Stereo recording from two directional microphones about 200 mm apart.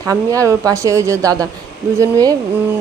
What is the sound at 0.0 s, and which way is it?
A woman's voice, 15° right (ahead or behind).